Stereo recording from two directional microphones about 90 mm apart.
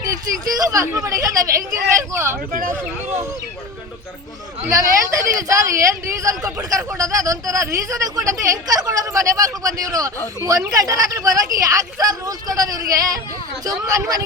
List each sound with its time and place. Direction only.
0.5 s speech: 40° right (ahead or behind)
4.7 s speech: 40° right (ahead or behind)